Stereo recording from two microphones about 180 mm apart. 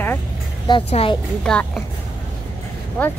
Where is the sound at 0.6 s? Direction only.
30° left (ahead or behind).